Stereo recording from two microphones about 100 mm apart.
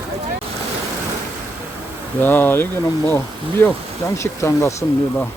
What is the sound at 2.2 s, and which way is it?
Speech, 20° left (ahead or behind).